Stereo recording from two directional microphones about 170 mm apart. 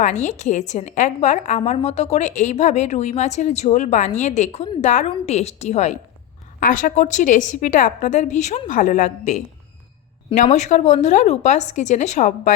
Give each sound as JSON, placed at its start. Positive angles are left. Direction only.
{"t": 0.0, "sound": "a woman's voice", "side_deg": 45}
{"t": 6.6, "sound": "a woman's voice", "side_deg": 50}